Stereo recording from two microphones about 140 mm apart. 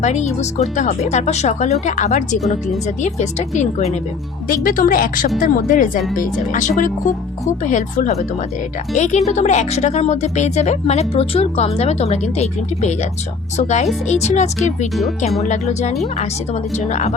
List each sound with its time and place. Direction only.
0.0 s speech: 55° left (ahead or behind)
4.4 s a woman's voice: 90° left; by 17.2 s 55° left (ahead or behind)